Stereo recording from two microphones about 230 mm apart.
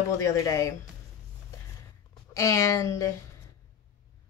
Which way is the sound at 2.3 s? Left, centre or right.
Centre.